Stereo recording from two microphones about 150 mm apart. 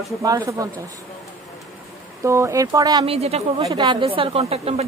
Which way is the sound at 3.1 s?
45° right (ahead or behind).